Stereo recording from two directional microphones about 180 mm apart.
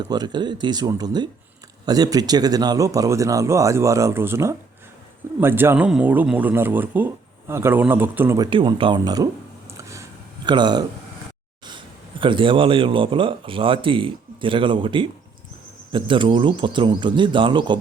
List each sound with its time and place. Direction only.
0.1 s speech: 25° right (ahead or behind)
8.4 s speech: 25° right (ahead or behind)
9.7 s a sound: 15° right (ahead or behind)
12.2 s speech: 30° right (ahead or behind)